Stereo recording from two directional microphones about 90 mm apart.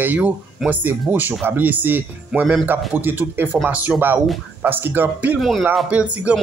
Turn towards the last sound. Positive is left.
turn(degrees=-15)  # may be behind; listen again after turning